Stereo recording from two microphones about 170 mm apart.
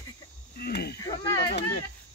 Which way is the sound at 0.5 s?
70° left (ahead or behind).